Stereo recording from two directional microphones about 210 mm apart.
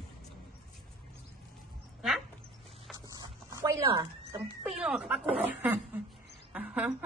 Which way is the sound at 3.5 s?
15° right (ahead or behind).